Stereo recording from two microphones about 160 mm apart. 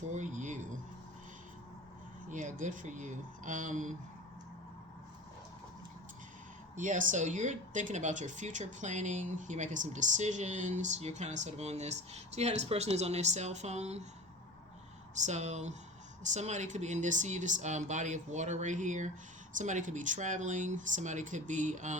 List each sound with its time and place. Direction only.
0.1 s a sound: 50° right (ahead or behind)
2.3 s speech: 50° right (ahead or behind)
6.7 s speech: 55° right (ahead or behind)
15.1 s speech: 45° right (ahead or behind)